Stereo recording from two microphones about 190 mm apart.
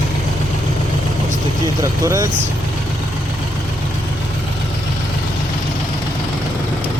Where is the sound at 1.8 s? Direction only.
15° right (ahead or behind).